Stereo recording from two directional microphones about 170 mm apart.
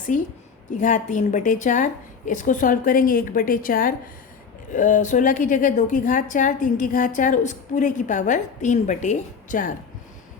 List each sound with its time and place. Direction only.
0.1 s a woman's voice: 50° left (ahead or behind)